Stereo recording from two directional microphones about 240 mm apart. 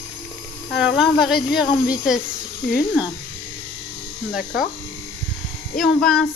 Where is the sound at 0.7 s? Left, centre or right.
Centre.